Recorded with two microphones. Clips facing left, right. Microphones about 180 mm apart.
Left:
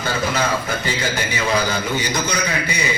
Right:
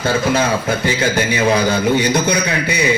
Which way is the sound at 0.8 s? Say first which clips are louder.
Right 6 dB; 60° right (ahead or behind).